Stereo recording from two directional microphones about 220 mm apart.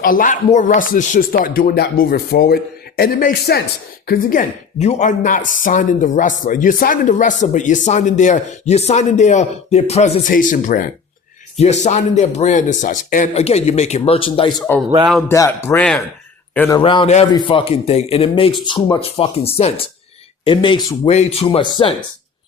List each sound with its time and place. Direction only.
0.0 s speech: 40° left (ahead or behind); by 14.6 s 25° left (ahead or behind)
15.3 s speech: 10° left (ahead or behind)
16.8 s a man's voice: 25° left (ahead or behind)